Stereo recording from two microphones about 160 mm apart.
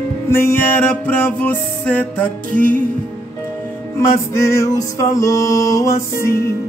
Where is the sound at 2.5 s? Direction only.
60° right (ahead or behind).